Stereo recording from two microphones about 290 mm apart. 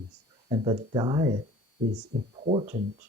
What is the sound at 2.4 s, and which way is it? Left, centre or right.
Speech, right.